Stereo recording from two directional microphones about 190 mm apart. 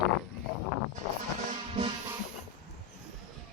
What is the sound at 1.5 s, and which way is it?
Music, 30° right (ahead or behind).